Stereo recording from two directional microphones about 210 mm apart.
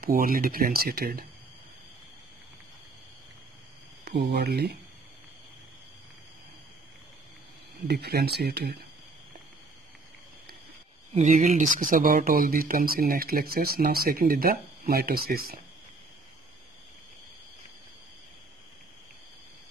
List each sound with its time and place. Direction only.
0.0 s speech: 40° right (ahead or behind)
4.0 s speech: 50° right (ahead or behind)
7.9 s speech: 50° right (ahead or behind)
11.1 s speech: 35° right (ahead or behind)